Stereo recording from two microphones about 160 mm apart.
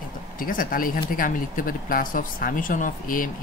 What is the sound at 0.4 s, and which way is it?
Speech, 60° left (ahead or behind).